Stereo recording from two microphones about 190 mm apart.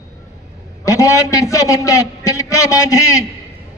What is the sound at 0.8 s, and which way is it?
A man's voice, 15° left (ahead or behind).